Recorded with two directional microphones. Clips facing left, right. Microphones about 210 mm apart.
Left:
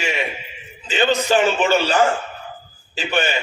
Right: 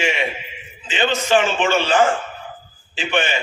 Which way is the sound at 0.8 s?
40° left (ahead or behind).